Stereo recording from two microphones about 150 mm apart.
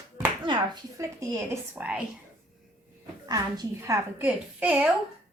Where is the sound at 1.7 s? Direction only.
10° right (ahead or behind).